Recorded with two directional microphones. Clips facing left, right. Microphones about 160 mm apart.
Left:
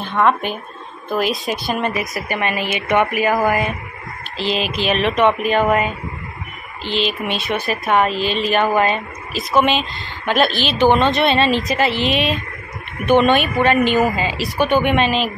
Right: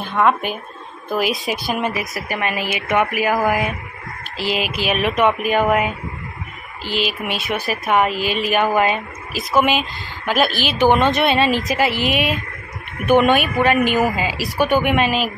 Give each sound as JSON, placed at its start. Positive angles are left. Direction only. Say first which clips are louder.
{"t": 0.0, "sound": "a woman's voice", "louder": "even", "side_deg": -5}
{"t": 10.5, "sound": "a woman's voice", "louder": "left 1 dB", "side_deg": 20}
{"t": 11.2, "sound": "a woman's voice", "louder": "left 1 dB", "side_deg": -10}